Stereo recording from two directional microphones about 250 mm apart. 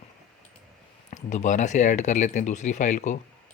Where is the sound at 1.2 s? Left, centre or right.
Left.